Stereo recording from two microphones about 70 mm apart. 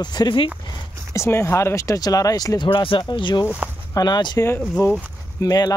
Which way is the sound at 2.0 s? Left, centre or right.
Left.